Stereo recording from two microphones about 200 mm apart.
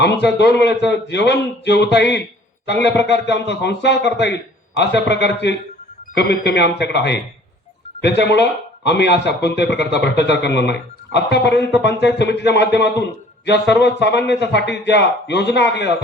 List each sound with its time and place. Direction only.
0.0 s speech: 60° left (ahead or behind)